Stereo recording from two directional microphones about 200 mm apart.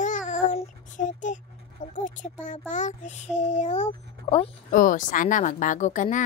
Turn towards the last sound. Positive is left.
turn(degrees=40)  # may be behind; listen again after turning